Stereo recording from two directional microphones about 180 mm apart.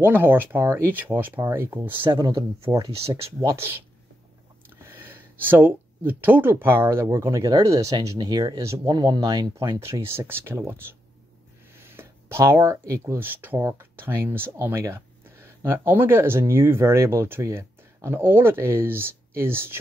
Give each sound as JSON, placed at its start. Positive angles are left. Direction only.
{"t": 0.0, "sound": "speech", "side_deg": -10}
{"t": 2.0, "sound": "speech", "side_deg": -25}
{"t": 2.8, "sound": "speech", "side_deg": -35}
{"t": 3.4, "sound": "speech", "side_deg": -15}
{"t": 4.8, "sound": "speech", "side_deg": -10}